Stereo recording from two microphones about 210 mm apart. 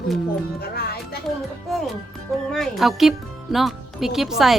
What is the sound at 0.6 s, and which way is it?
Music, 50° left (ahead or behind).